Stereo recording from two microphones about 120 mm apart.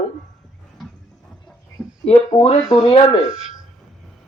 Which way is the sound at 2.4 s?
65° left (ahead or behind).